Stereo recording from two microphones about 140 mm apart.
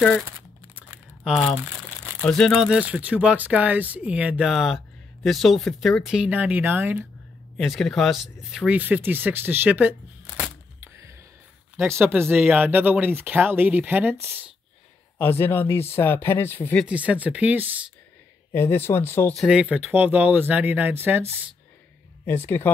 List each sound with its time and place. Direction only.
0.7 s crumpling: 10° right (ahead or behind)
2.2 s speech: 5° left (ahead or behind); by 7.1 s 15° right (ahead or behind)
7.5 s speech: centre (ahead or behind)
11.7 s speech: 15° right (ahead or behind)
15.1 s speech: 15° left (ahead or behind)
16.8 s speech: 10° right (ahead or behind)
18.5 s speech: 15° left (ahead or behind)
19.3 s speech: 5° right (ahead or behind)
22.2 s speech: 15° left (ahead or behind)